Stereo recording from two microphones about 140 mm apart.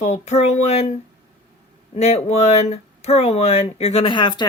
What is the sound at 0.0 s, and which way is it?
Speech, 55° left (ahead or behind).